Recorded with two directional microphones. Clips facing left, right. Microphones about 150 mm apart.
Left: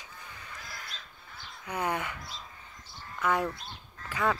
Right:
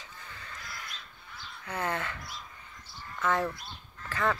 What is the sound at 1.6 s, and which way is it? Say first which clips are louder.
Speech: left 1 dB; 15° left (ahead or behind).